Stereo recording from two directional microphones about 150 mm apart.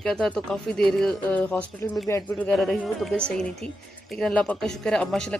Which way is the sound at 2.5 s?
5° left (ahead or behind).